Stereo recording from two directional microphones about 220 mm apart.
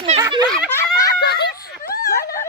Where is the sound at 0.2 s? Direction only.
20° right (ahead or behind).